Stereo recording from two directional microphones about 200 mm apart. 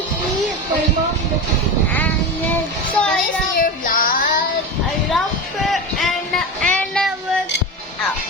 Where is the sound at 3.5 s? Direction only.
45° left (ahead or behind).